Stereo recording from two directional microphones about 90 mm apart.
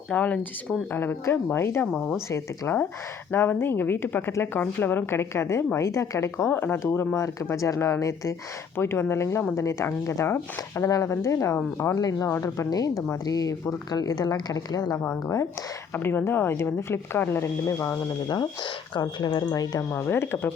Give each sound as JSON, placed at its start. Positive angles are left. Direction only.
{"t": 0.1, "sound": "speech", "side_deg": 15}
{"t": 11.9, "sound": "speech", "side_deg": 45}
{"t": 16.0, "sound": "speech", "side_deg": 25}
{"t": 18.9, "sound": "speech", "side_deg": 60}
{"t": 19.5, "sound": "speech", "side_deg": 45}
{"t": 19.9, "sound": "speech", "side_deg": 25}